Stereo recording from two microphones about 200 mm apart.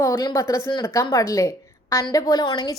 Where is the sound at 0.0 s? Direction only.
15° left (ahead or behind).